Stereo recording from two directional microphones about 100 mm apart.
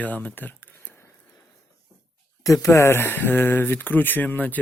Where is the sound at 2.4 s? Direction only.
35° left (ahead or behind); by 4.5 s 15° left (ahead or behind).